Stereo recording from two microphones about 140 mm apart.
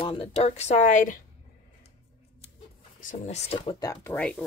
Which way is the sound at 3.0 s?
60° left (ahead or behind).